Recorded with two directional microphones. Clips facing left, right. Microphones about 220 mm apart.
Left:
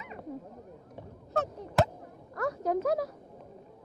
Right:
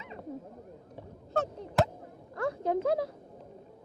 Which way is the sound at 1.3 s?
30° right (ahead or behind).